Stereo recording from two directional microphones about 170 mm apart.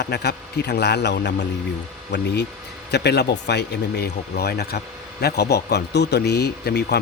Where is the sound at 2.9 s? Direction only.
75° left (ahead or behind).